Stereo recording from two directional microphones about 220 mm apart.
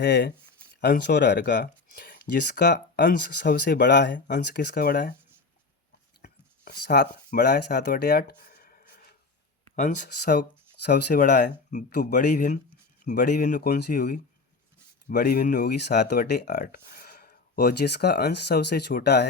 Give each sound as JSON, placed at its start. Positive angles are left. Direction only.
{"t": 0.0, "sound": "speech", "side_deg": 50}
{"t": 6.8, "sound": "speech", "side_deg": 50}